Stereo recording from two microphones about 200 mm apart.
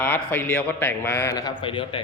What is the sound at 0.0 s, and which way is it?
A man's voice, 10° left (ahead or behind).